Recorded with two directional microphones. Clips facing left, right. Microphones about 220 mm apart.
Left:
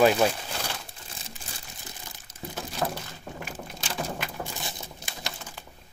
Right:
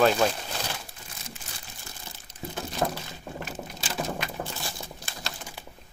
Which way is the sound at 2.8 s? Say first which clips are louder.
Right 2 dB; 10° right (ahead or behind).